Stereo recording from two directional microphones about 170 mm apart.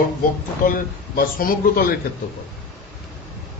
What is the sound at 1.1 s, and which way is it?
Speech, 60° left (ahead or behind).